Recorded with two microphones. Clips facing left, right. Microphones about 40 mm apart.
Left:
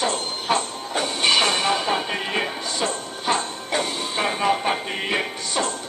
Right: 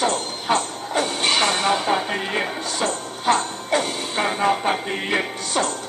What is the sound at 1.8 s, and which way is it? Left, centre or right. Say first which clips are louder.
Music: right 2 dB; left.